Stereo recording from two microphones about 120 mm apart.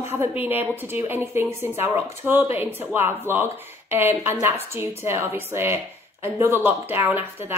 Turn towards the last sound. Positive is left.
turn(degrees=-15)  # may be behind; listen again after turning